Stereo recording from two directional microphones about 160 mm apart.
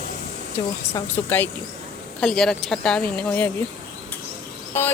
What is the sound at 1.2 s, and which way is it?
Speech, 15° left (ahead or behind).